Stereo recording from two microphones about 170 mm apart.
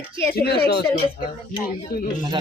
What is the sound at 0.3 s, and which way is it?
Speech, 65° left (ahead or behind).